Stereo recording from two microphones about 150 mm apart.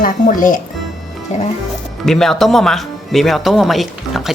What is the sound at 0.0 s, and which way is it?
Speech, 65° left (ahead or behind).